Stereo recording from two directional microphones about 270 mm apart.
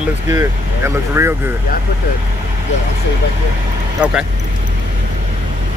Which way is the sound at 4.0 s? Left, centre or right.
Centre.